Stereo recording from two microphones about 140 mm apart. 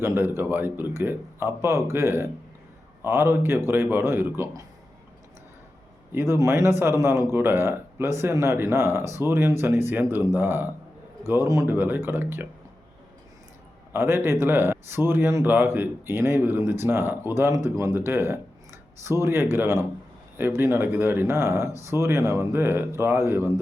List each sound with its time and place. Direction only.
0.0 s a man's voice: 15° right (ahead or behind)
6.1 s a man's voice: 20° right (ahead or behind)
13.9 s a man's voice: 15° right (ahead or behind)